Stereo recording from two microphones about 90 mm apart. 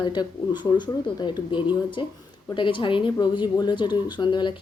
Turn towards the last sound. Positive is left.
turn(degrees=60)  # may be behind; listen again after turning